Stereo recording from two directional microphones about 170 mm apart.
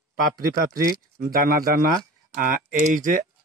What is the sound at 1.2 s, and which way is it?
Speech, 55° right (ahead or behind).